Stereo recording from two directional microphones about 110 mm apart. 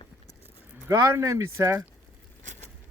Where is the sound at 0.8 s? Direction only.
30° right (ahead or behind).